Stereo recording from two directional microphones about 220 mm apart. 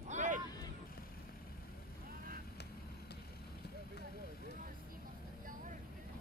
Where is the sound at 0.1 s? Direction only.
35° right (ahead or behind).